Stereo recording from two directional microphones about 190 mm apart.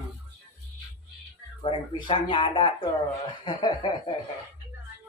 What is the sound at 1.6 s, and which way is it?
Speech, 25° left (ahead or behind).